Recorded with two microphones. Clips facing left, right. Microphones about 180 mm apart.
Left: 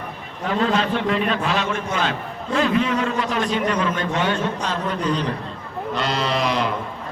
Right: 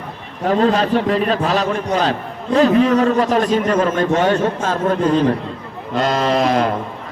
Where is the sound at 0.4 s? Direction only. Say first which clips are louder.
Right 6 dB; 40° right (ahead or behind).